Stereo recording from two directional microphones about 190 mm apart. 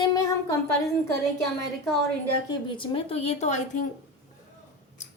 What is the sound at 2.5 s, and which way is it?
Speech, 25° left (ahead or behind).